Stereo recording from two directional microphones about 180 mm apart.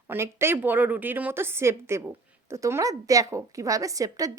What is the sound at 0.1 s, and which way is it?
A woman's voice, 15° right (ahead or behind).